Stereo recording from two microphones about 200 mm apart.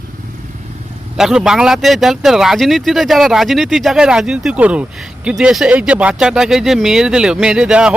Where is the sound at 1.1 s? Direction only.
5° right (ahead or behind).